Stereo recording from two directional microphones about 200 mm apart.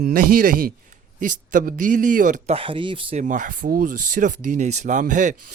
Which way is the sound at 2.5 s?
25° right (ahead or behind).